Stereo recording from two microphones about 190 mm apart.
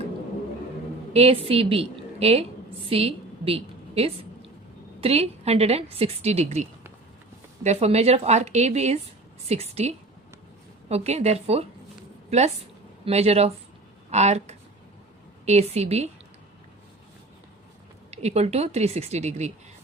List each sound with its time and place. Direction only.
1.1 s a woman's voice: 30° right (ahead or behind)
2.9 s a sound: 30° right (ahead or behind)
4.9 s a woman's voice: 30° right (ahead or behind)
13.1 s a woman's voice: 35° right (ahead or behind)
18.1 s a woman's voice: 35° right (ahead or behind)